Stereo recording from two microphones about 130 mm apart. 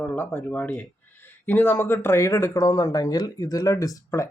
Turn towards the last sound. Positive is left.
turn(degrees=25)  # may be behind; listen again after turning